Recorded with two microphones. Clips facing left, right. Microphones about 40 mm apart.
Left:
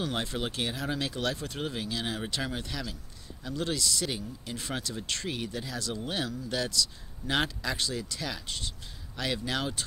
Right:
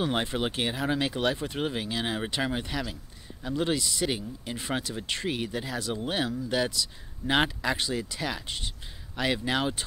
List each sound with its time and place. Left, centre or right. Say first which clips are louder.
0.0 s speech: right 4 dB; right